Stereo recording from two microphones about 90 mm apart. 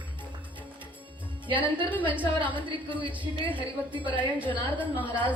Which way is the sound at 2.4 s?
65° right (ahead or behind).